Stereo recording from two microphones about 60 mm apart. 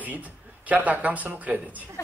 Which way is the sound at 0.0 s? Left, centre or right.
Right.